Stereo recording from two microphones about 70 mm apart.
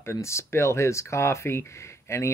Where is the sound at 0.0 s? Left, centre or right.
Left.